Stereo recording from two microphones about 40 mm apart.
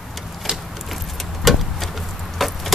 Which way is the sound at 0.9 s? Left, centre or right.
Centre.